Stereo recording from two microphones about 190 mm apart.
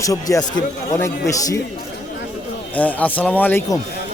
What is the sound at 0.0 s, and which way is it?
A man's voice, 20° left (ahead or behind).